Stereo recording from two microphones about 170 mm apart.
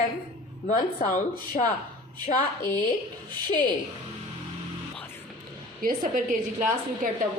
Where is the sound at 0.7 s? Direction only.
45° left (ahead or behind).